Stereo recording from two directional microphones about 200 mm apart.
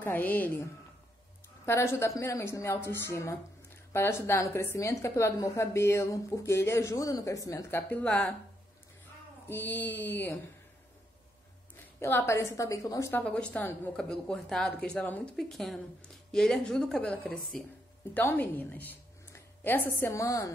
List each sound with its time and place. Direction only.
0.0 s a woman's voice: 10° left (ahead or behind)
1.7 s a woman's voice: 15° left (ahead or behind)
9.5 s a woman's voice: 10° left (ahead or behind)
11.7 s a woman's voice: 10° left (ahead or behind)